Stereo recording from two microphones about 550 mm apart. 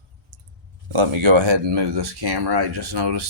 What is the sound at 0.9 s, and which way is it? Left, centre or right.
Speech, right.